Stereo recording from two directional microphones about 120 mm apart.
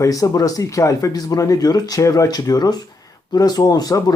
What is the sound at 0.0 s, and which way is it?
Speech, 30° left (ahead or behind).